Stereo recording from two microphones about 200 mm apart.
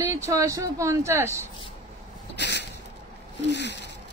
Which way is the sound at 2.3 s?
60° left (ahead or behind).